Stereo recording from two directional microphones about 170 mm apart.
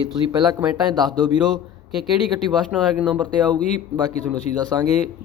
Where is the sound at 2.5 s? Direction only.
5° right (ahead or behind).